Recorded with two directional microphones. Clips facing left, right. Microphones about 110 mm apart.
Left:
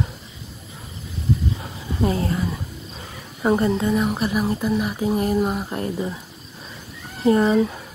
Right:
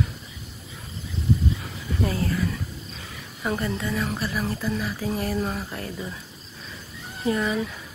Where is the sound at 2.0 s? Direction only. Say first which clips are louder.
Left 4 dB; 25° left (ahead or behind).